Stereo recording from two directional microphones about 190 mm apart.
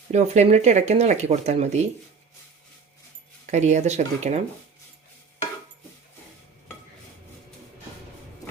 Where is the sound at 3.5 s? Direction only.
35° right (ahead or behind).